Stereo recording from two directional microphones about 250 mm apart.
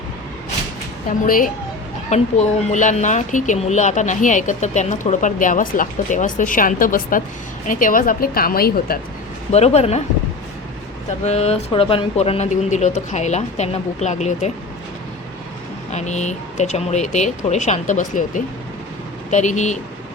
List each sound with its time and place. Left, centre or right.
1.2 s speech: left
9.5 s speech: left
11.2 s speech: left
15.9 s speech: left